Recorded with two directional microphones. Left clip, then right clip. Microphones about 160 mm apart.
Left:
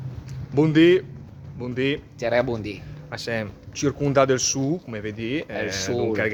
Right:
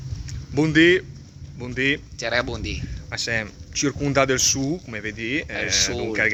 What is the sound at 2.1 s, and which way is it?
Speech, 20° left (ahead or behind).